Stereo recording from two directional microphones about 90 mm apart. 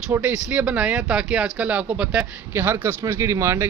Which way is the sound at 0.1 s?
15° right (ahead or behind).